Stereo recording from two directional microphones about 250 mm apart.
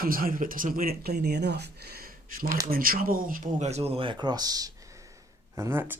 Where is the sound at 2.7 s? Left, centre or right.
Right; by 5.9 s centre.